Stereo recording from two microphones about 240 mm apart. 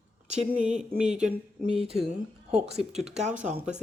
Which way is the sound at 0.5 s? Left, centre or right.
Centre.